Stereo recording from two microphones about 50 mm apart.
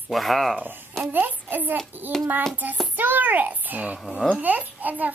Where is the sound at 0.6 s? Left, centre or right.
Right.